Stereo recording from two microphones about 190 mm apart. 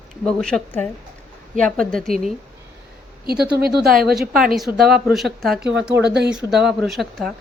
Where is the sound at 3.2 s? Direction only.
55° right (ahead or behind).